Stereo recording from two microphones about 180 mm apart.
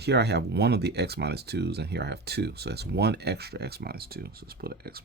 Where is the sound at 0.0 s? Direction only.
65° right (ahead or behind).